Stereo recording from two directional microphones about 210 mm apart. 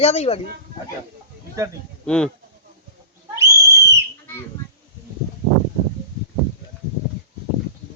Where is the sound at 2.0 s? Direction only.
5° left (ahead or behind).